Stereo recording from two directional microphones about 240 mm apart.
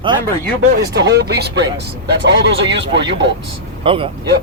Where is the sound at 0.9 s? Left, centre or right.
Right.